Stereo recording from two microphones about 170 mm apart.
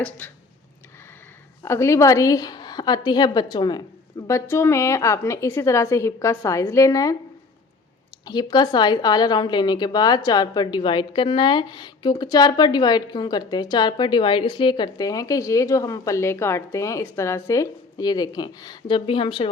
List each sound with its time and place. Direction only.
0.2 s a woman's voice: 10° left (ahead or behind)
1.6 s a woman's voice: 15° left (ahead or behind)
8.2 s a woman's voice: 25° left (ahead or behind)